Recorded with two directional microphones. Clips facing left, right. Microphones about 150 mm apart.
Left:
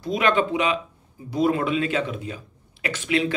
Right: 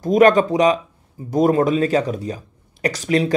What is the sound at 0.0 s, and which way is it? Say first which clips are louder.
Speech: right 8 dB; 45° right (ahead or behind).